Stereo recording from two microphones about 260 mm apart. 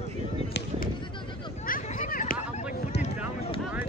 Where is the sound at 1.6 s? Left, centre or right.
Left.